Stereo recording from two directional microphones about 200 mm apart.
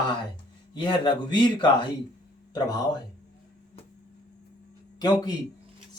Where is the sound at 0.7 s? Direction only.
20° left (ahead or behind).